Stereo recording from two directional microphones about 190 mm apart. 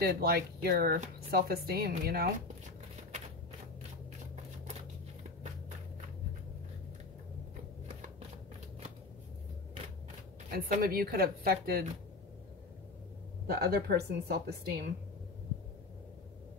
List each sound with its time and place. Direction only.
0.0 s a woman's voice: 55° right (ahead or behind)
10.5 s speech: 50° right (ahead or behind)
13.5 s a woman's voice: 55° right (ahead or behind)